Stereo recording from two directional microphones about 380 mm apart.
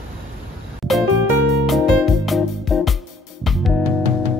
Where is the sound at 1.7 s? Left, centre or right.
Centre.